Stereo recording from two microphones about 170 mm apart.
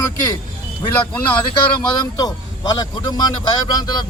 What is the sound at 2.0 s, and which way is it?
A man's voice, 25° left (ahead or behind).